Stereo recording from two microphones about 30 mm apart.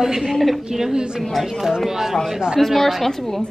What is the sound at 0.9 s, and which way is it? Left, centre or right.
Speech, right.